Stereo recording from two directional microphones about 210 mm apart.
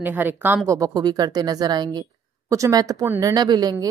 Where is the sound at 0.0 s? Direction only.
10° right (ahead or behind).